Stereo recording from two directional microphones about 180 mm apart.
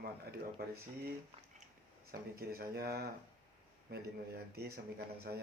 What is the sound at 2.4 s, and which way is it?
A man's voice, 55° right (ahead or behind).